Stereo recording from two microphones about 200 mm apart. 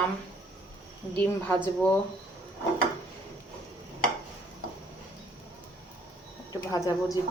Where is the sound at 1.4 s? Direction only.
10° left (ahead or behind).